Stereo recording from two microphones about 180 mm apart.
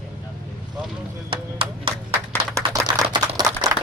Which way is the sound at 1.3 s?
30° right (ahead or behind).